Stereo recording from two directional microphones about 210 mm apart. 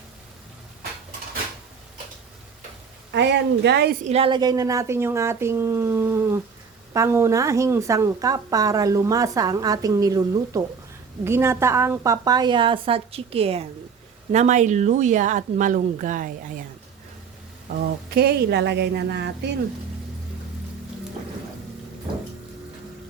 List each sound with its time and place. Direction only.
3.1 s speech: 55° right (ahead or behind)
4.0 s a woman's voice: 30° right (ahead or behind)
18.1 s speech: 50° right (ahead or behind)